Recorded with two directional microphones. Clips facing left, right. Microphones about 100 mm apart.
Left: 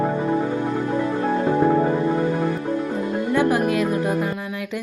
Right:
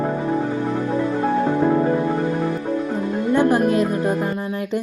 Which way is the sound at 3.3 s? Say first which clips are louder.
Right 3 dB; 30° right (ahead or behind).